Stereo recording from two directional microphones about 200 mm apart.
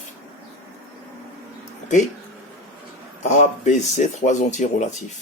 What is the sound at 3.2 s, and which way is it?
Speech, 35° left (ahead or behind).